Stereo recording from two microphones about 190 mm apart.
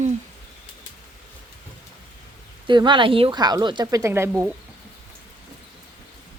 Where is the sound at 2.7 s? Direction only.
25° right (ahead or behind).